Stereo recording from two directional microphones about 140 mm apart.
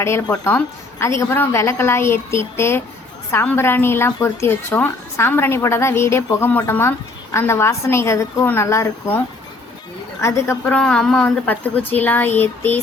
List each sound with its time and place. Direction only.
0.0 s a woman's voice: 20° left (ahead or behind)
10.8 s a woman's voice: 5° left (ahead or behind)